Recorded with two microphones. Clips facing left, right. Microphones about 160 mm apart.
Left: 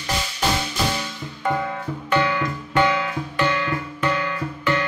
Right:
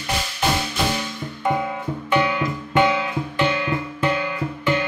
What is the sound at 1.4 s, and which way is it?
Music, 20° right (ahead or behind).